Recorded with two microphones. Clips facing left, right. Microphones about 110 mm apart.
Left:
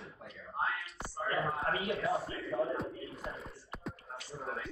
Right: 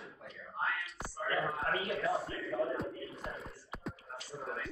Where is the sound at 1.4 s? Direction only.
Centre (ahead or behind).